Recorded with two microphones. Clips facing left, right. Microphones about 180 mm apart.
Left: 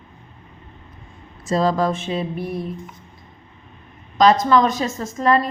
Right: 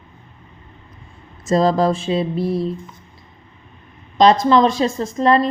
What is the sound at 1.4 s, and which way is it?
A woman's voice, 40° right (ahead or behind).